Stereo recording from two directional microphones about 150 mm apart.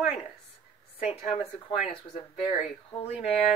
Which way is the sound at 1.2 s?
45° left (ahead or behind).